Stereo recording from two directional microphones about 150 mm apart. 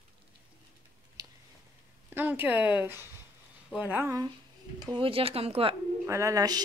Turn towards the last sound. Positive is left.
turn(degrees=-25)  # may be behind; listen again after turning